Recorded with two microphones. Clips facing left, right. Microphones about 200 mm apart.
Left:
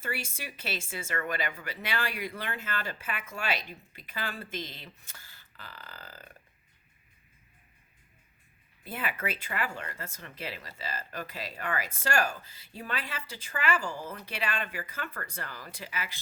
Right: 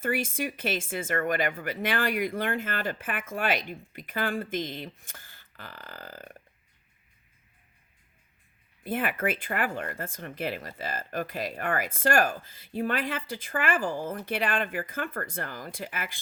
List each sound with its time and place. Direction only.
0.0 s speech: 50° right (ahead or behind)
8.8 s speech: 50° right (ahead or behind)